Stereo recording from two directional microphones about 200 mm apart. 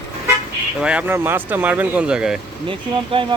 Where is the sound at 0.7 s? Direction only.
5° right (ahead or behind).